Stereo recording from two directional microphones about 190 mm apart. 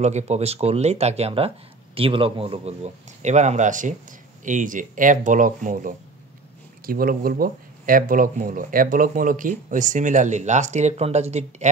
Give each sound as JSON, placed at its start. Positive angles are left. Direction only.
{"t": 0.0, "sound": "a man's voice", "side_deg": -35}